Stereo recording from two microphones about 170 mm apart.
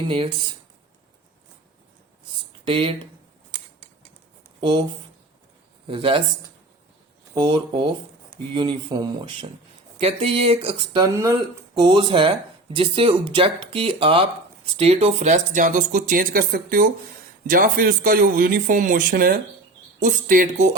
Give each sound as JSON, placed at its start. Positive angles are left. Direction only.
{"t": 0.1, "sound": "speech", "side_deg": -30}
{"t": 2.6, "sound": "speech", "side_deg": -30}
{"t": 4.6, "sound": "speech", "side_deg": -25}
{"t": 5.9, "sound": "speech", "side_deg": -30}
{"t": 7.3, "sound": "speech", "side_deg": -25}
{"t": 11.8, "sound": "speech", "side_deg": -30}